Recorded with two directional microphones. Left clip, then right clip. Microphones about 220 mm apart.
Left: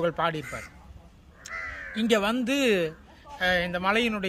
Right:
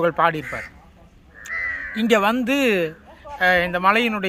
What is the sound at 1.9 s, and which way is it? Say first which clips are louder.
Speech: right 6 dB; 5° left (ahead or behind).